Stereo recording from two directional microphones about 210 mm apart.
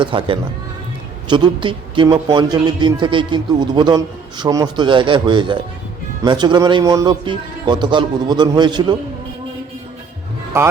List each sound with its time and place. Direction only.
0.0 s a man's voice: 25° right (ahead or behind)